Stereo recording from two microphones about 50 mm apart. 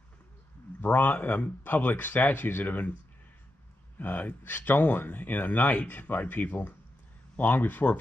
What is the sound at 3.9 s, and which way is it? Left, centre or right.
Speech, left.